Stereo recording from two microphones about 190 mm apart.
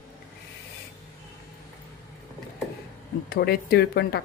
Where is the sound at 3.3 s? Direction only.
55° left (ahead or behind).